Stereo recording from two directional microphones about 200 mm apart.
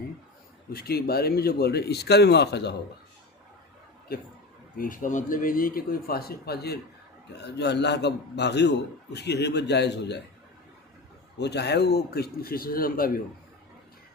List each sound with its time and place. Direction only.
0.7 s speech: 50° left (ahead or behind)
4.8 s a man's voice: 40° left (ahead or behind); by 10.2 s 55° left (ahead or behind)
11.3 s speech: 55° left (ahead or behind)